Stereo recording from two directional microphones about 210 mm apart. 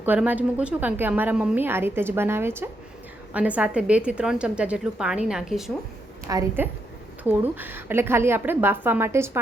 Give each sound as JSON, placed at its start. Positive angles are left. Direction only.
{"t": 0.0, "sound": "a woman's voice", "side_deg": -10}
{"t": 6.2, "sound": "a woman's voice", "side_deg": -15}